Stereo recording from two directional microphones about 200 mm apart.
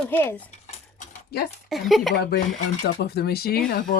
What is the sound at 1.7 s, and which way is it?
Speech, centre (ahead or behind).